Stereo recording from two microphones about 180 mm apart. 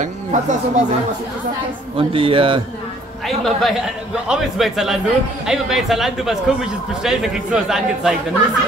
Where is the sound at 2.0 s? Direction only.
30° right (ahead or behind).